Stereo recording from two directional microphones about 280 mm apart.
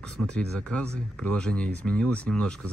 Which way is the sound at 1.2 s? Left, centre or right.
Centre.